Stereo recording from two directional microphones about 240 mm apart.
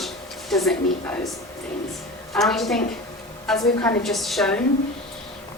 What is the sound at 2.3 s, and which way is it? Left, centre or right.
Speech, centre.